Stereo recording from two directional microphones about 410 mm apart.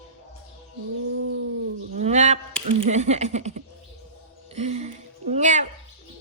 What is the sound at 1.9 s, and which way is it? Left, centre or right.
A woman's voice, centre.